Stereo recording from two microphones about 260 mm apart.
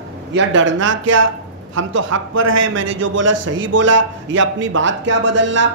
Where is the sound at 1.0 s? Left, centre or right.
Right.